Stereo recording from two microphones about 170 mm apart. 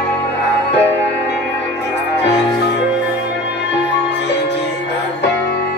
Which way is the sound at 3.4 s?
90° left.